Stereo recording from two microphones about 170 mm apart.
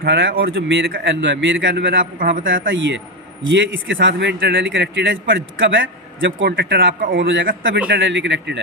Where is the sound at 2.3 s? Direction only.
55° right (ahead or behind); by 6.9 s 85° right.